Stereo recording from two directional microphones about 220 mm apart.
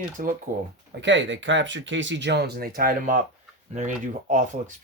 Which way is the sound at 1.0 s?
55° right (ahead or behind).